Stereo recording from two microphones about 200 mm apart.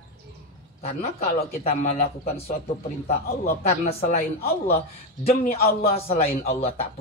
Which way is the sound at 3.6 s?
30° left (ahead or behind).